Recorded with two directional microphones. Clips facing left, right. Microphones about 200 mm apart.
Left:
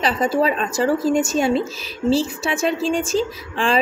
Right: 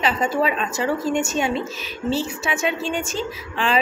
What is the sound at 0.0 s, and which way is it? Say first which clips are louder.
A woman's voice: left 2 dB; 35° left (ahead or behind).